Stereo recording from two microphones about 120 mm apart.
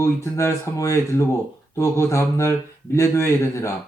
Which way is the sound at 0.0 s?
25° left (ahead or behind).